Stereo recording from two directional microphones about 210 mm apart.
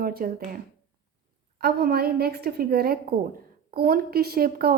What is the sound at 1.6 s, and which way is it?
A woman's voice, 45° right (ahead or behind).